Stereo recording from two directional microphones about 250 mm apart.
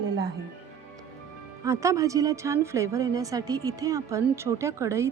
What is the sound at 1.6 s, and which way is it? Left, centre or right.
A woman's voice, centre.